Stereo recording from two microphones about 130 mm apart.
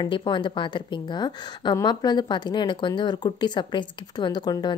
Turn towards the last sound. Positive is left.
turn(degrees=30)  # may be behind; listen again after turning